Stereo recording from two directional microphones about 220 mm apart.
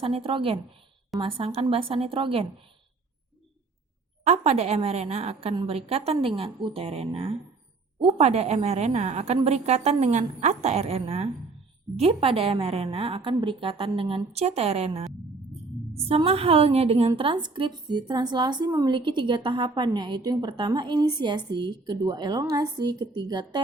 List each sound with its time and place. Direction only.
0.0 s a woman's voice: 25° right (ahead or behind)
4.2 s a woman's voice: 30° right (ahead or behind)